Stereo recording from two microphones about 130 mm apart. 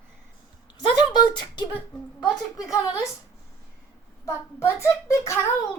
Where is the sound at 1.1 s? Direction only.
35° left (ahead or behind).